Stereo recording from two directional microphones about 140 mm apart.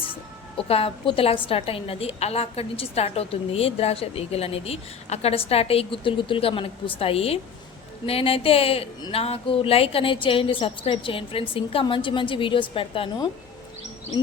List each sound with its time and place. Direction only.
0.5 s a woman's voice: 40° left (ahead or behind)